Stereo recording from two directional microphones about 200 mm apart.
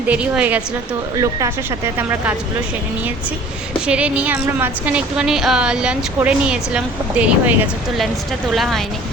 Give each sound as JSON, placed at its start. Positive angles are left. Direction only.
{"t": 0.1, "sound": "a woman's voice", "side_deg": -5}
{"t": 3.8, "sound": "a woman's voice", "side_deg": -5}
{"t": 8.5, "sound": "a woman's voice", "side_deg": 0}